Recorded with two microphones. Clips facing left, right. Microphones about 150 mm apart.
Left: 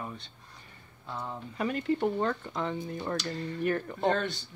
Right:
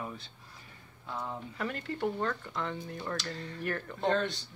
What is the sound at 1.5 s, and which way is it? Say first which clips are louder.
Speech: left 9 dB; 20° left (ahead or behind).